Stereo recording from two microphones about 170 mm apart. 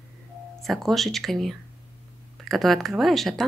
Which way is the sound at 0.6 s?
Centre (ahead or behind).